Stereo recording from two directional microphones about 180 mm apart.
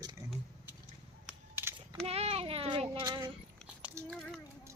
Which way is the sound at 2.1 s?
35° right (ahead or behind).